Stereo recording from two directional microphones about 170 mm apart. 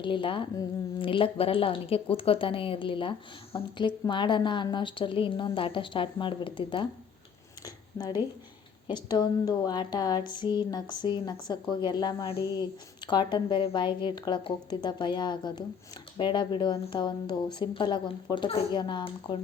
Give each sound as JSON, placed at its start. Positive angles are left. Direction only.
{"t": 0.0, "sound": "a woman's voice", "side_deg": 30}
{"t": 7.6, "sound": "a sound", "side_deg": 20}
{"t": 8.9, "sound": "a woman's voice", "side_deg": 25}